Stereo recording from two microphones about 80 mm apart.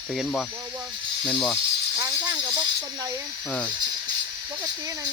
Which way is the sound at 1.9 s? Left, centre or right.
Right.